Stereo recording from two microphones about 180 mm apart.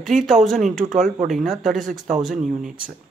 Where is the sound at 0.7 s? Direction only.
45° right (ahead or behind).